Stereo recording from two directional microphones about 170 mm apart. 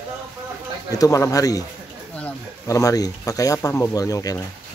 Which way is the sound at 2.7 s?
20° left (ahead or behind).